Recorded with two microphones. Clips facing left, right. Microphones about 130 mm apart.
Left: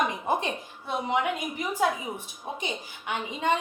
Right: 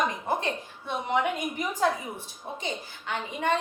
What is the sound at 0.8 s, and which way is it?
A woman's voice, 5° left (ahead or behind).